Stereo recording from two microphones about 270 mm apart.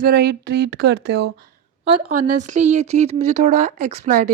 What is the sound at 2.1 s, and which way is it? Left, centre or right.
Speech, right.